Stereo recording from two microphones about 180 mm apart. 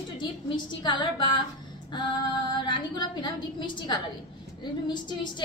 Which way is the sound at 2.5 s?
25° left (ahead or behind).